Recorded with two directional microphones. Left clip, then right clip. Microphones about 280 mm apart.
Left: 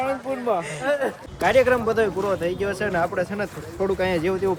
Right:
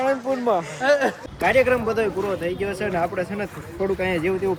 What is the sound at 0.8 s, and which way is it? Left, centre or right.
Speech, right.